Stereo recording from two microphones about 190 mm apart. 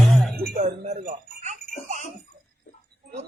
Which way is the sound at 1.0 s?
45° right (ahead or behind).